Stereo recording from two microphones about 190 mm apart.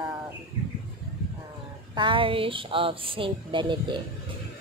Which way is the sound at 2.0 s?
25° right (ahead or behind).